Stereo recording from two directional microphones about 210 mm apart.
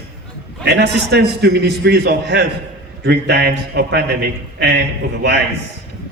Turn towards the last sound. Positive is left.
turn(degrees=-55)  # may be behind; listen again after turning